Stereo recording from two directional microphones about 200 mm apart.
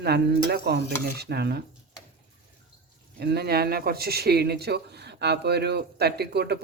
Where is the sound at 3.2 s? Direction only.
55° right (ahead or behind).